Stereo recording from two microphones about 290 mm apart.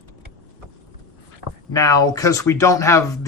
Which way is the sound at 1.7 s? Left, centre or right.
Centre.